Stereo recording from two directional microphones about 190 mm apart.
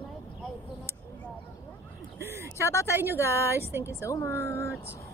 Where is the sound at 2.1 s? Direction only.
15° right (ahead or behind).